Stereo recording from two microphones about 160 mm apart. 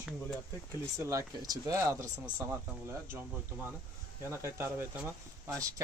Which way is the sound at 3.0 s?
10° right (ahead or behind).